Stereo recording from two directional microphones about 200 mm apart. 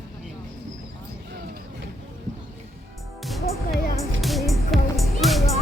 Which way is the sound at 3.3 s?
Centre (ahead or behind).